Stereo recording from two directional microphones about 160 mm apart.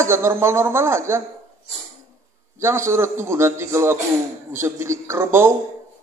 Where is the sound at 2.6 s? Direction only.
15° right (ahead or behind).